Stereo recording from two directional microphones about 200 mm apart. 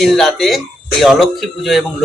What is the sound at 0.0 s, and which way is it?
Speech, centre (ahead or behind).